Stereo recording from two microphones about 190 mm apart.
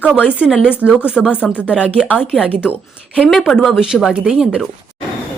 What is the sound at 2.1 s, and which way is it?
Speech, 10° left (ahead or behind).